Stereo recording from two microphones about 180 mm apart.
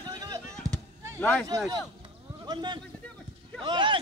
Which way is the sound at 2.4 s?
25° right (ahead or behind).